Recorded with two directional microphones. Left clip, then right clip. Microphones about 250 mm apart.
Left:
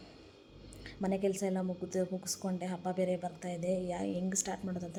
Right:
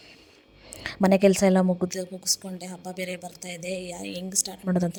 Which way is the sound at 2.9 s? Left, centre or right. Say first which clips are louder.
Even; right.